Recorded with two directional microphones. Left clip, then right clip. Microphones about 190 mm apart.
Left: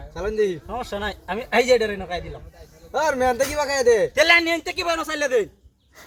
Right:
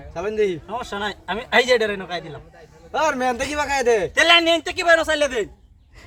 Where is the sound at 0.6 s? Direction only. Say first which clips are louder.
Right 1 dB; 35° right (ahead or behind).